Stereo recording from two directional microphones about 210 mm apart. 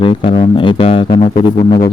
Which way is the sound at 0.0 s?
25° left (ahead or behind).